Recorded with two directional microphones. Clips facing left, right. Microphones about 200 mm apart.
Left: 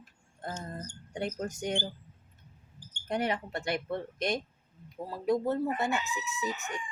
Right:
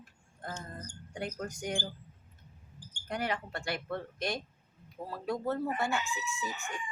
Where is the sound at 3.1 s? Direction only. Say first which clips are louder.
Left 4 dB; 20° left (ahead or behind).